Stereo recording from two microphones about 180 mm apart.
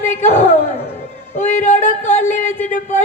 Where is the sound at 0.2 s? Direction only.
40° left (ahead or behind).